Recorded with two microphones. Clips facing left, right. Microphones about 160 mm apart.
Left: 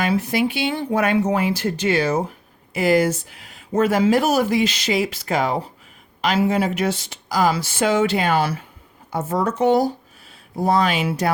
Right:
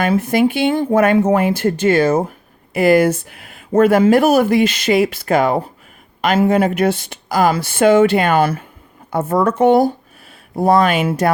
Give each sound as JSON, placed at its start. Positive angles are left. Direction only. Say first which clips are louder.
{"t": 0.0, "sound": "speech", "louder": "right 5 dB", "side_deg": -50}